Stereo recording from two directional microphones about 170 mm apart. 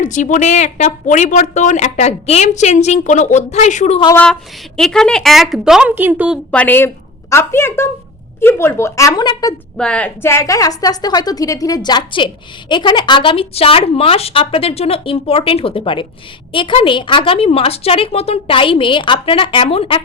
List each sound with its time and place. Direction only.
0.0 s a woman's voice: 45° left (ahead or behind)
4.1 s a woman's voice: 10° left (ahead or behind); by 6.4 s 10° right (ahead or behind)
6.5 s a woman's voice: 10° left (ahead or behind)
9.7 s a woman's voice: 5° left (ahead or behind); by 20.0 s 35° left (ahead or behind)